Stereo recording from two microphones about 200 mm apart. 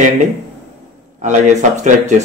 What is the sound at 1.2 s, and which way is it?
Speech, 35° right (ahead or behind).